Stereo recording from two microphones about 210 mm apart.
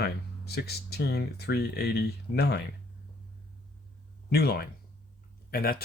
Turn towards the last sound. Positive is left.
turn(degrees=45)  # may be behind; listen again after turning